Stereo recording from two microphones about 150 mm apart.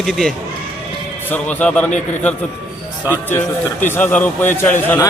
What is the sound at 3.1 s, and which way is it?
A man's voice, 15° left (ahead or behind).